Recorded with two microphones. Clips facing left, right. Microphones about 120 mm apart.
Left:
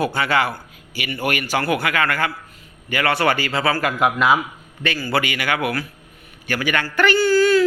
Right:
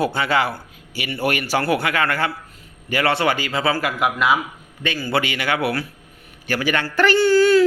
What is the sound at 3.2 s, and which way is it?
Speech, 15° right (ahead or behind).